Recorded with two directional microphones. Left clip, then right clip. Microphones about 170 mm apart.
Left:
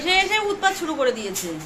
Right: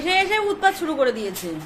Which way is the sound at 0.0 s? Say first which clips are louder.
Even; 35° right (ahead or behind).